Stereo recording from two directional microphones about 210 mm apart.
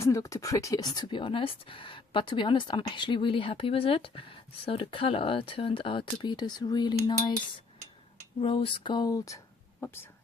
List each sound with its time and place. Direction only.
0.0 s speech: 15° left (ahead or behind)
8.4 s speech: 25° left (ahead or behind); by 10.1 s 10° left (ahead or behind)